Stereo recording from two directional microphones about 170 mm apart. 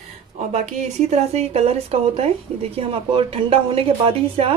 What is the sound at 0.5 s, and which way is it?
Speech, 45° right (ahead or behind).